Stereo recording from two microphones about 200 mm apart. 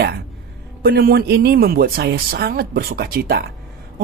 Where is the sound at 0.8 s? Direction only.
50° right (ahead or behind).